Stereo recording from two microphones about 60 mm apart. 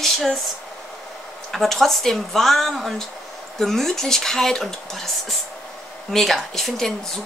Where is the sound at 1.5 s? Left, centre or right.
Centre.